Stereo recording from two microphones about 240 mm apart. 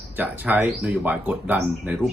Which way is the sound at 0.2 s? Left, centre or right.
Centre.